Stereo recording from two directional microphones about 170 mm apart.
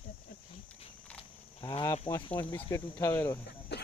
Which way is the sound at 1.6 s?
25° left (ahead or behind).